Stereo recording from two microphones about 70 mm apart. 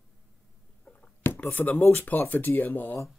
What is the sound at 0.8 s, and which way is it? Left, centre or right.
Speech, left.